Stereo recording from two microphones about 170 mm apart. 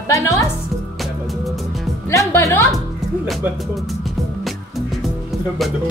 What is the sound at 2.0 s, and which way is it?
Speech, 15° left (ahead or behind).